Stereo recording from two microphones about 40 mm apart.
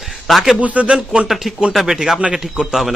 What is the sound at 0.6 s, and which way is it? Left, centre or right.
Speech, right.